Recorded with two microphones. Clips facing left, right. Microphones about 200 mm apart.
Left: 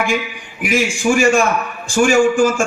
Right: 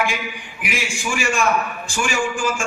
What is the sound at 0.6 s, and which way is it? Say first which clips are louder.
A man's voice: left 10 dB; 45° left (ahead or behind).